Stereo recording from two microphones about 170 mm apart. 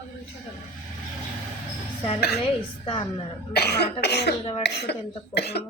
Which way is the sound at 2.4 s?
30° left (ahead or behind).